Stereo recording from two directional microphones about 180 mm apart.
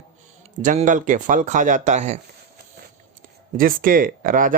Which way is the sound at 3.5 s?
50° right (ahead or behind).